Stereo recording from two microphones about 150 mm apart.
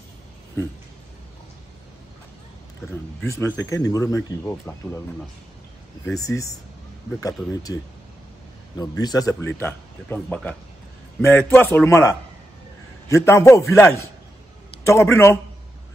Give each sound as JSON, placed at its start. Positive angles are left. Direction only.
{"t": 3.3, "sound": "speech", "side_deg": 20}
{"t": 6.0, "sound": "speech", "side_deg": 20}